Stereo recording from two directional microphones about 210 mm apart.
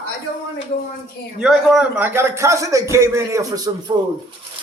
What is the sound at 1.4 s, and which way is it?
A man's voice, 5° right (ahead or behind).